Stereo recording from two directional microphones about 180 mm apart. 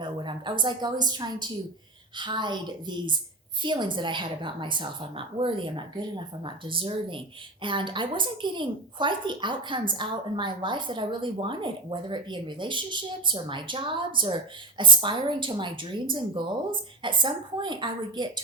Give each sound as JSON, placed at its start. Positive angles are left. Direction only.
{"t": 0.0, "sound": "a woman's voice", "side_deg": -25}